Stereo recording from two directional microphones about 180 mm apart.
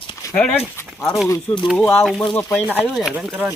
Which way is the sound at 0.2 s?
15° left (ahead or behind).